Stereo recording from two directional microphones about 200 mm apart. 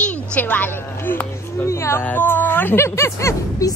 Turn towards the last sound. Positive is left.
turn(degrees=15)  # may be behind; listen again after turning